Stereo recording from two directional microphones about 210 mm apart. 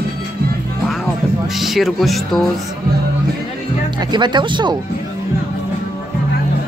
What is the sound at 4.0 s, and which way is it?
Speech, 20° right (ahead or behind).